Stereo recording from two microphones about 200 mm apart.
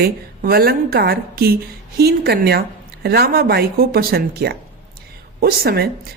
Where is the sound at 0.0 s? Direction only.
50° right (ahead or behind).